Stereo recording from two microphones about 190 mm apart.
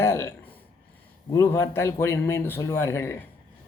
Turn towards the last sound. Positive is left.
turn(degrees=15)  # may be behind; listen again after turning